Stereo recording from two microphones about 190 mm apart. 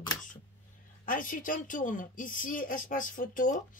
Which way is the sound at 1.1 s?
45° left (ahead or behind).